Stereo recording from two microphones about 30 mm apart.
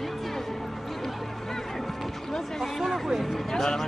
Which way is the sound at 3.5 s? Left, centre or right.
Centre.